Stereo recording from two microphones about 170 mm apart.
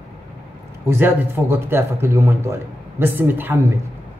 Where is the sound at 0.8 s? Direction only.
10° right (ahead or behind).